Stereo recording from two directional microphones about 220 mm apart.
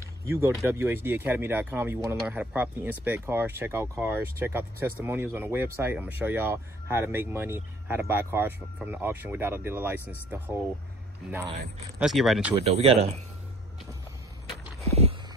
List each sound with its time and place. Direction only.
0.3 s speech: 10° right (ahead or behind)
12.0 s speech: centre (ahead or behind)
12.6 s speech: 30° right (ahead or behind)